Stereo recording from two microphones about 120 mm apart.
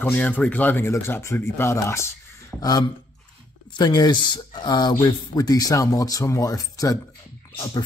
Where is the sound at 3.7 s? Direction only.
35° left (ahead or behind).